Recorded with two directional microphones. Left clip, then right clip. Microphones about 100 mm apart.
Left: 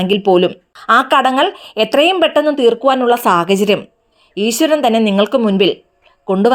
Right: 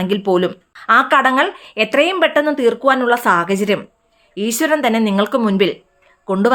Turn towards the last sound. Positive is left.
turn(degrees=25)  # may be behind; listen again after turning